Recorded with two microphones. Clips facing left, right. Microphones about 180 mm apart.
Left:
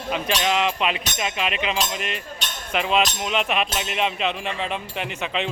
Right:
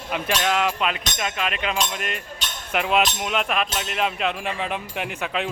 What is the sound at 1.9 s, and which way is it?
Speech, 50° right (ahead or behind).